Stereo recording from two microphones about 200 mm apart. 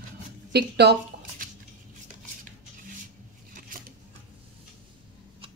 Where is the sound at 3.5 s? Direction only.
45° right (ahead or behind).